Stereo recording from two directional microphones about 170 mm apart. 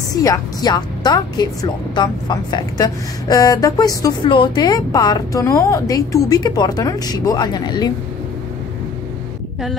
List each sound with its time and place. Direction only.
0.1 s a woman's voice: 20° left (ahead or behind)